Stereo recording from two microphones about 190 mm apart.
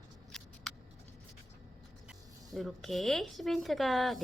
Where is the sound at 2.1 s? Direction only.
Centre (ahead or behind).